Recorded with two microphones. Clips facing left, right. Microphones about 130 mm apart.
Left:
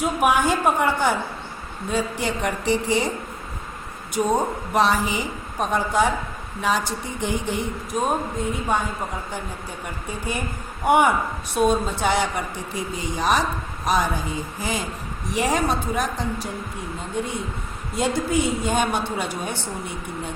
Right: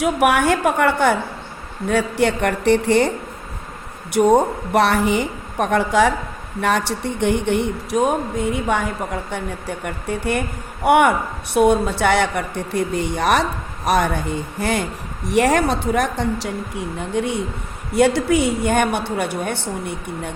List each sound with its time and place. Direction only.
0.0 s a woman's voice: 70° right (ahead or behind)
4.4 s a woman's voice: 70° right (ahead or behind)
6.6 s a woman's voice: 65° right (ahead or behind)